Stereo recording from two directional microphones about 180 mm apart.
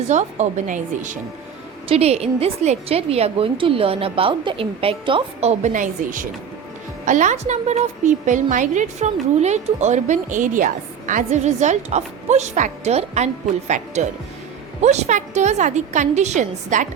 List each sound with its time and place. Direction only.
0.1 s a woman's voice: 40° right (ahead or behind)